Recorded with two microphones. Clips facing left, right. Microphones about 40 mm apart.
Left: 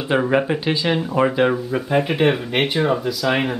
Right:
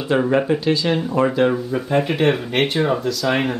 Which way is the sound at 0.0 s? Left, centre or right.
Centre.